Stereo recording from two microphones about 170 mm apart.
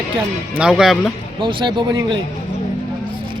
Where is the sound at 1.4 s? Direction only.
30° right (ahead or behind).